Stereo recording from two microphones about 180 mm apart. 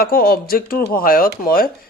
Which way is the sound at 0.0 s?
55° left (ahead or behind).